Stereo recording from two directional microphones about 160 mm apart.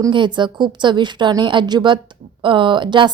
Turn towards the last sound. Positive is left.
turn(degrees=-30)  # may be behind; listen again after turning